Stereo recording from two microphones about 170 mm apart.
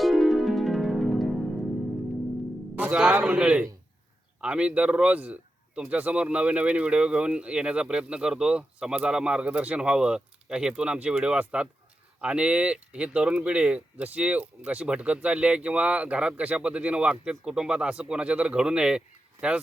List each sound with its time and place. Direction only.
0.0 s music: centre (ahead or behind)
2.7 s a man's voice: 5° right (ahead or behind)